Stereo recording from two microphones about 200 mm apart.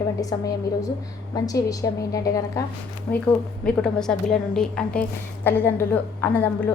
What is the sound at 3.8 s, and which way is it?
A woman's voice, 5° left (ahead or behind).